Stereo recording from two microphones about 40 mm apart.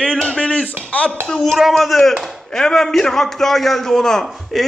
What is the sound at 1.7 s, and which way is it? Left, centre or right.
Speech, centre.